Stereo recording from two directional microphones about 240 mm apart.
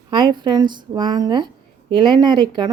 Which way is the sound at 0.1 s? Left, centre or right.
Centre.